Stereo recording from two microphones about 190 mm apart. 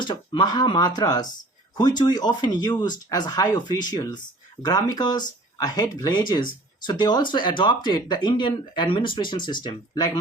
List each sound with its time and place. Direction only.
0.0 s speech: 25° left (ahead or behind)